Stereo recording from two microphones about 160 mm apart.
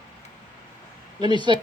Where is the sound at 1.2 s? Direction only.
30° right (ahead or behind).